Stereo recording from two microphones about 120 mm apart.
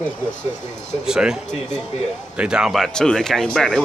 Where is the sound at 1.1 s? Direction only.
5° right (ahead or behind).